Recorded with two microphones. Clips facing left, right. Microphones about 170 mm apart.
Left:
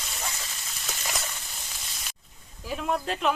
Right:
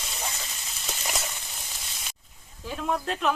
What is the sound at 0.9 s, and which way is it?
Frying, 10° right (ahead or behind).